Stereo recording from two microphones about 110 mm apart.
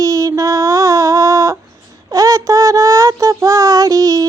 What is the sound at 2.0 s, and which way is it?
Child singing, 30° right (ahead or behind).